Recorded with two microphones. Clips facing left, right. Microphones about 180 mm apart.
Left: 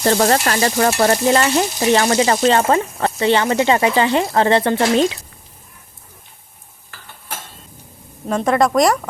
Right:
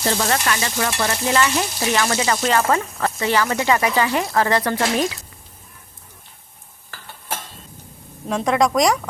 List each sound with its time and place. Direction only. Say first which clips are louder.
0.0 s stir: left 6 dB; 50° left (ahead or behind)
0.3 s stir: left 6 dB; 40° left (ahead or behind)
8.3 s speech: left 3 dB; centre (ahead or behind)